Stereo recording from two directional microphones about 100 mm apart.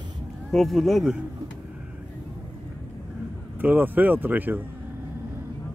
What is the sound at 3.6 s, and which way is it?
Speech, 20° right (ahead or behind).